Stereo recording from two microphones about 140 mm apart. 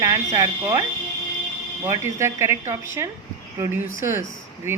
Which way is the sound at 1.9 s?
20° right (ahead or behind).